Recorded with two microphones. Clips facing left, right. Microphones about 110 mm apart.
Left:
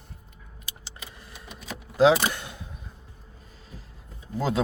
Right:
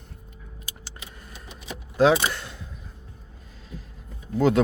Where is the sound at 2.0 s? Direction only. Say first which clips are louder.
Even; 15° left (ahead or behind).